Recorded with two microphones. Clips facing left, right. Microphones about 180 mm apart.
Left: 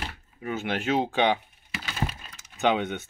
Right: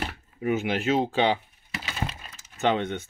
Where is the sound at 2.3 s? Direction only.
Centre (ahead or behind).